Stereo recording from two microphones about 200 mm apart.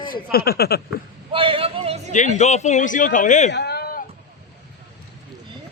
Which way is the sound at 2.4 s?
35° left (ahead or behind).